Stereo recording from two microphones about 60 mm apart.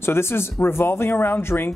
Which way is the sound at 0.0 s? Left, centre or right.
Left.